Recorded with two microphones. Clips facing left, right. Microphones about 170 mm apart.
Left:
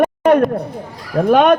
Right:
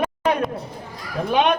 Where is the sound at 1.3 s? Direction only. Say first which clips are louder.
Left 7 dB; 50° left (ahead or behind).